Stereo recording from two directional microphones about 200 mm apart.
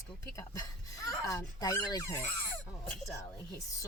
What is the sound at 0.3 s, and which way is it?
Speech, 15° left (ahead or behind).